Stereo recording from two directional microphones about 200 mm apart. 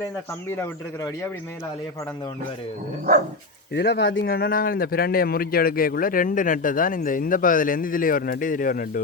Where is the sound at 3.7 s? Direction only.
55° left (ahead or behind).